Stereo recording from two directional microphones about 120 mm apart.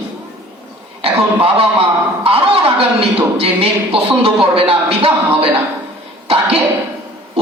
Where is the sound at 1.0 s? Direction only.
55° right (ahead or behind).